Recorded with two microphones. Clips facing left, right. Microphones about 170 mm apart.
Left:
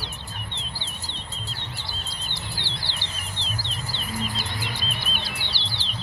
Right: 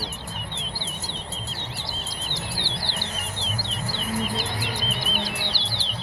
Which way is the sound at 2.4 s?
45° right (ahead or behind).